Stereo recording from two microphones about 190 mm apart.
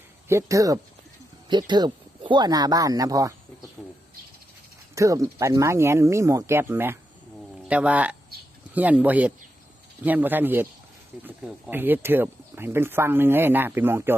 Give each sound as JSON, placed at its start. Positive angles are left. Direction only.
{"t": 0.3, "sound": "speech", "side_deg": -15}
{"t": 4.9, "sound": "speech", "side_deg": -15}